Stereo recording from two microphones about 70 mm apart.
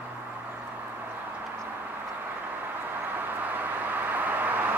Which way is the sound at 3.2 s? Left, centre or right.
Right.